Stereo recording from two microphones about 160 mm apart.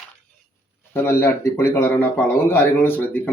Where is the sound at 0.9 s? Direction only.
15° left (ahead or behind).